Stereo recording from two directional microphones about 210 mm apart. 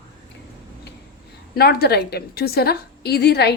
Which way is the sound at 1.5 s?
50° left (ahead or behind).